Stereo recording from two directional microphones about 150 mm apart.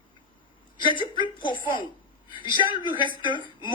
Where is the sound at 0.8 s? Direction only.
35° left (ahead or behind).